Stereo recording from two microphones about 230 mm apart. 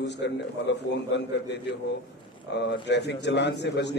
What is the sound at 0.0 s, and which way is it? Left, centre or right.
A man's voice, left.